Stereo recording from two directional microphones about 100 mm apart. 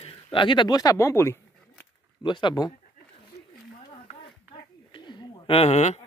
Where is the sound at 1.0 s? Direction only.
25° left (ahead or behind).